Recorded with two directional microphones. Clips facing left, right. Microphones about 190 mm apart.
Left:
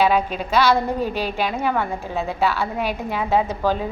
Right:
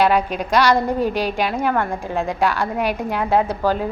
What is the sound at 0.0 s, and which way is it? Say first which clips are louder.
A woman's voice: right 1 dB; 10° right (ahead or behind).